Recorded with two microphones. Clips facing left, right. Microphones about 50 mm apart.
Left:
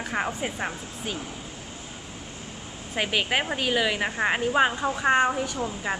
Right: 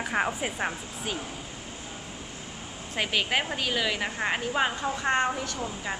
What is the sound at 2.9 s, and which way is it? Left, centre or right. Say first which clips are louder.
A woman's voice: left 2 dB; centre.